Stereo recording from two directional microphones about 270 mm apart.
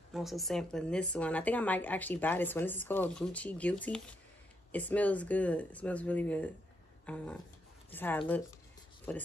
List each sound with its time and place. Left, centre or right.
0.1 s speech: centre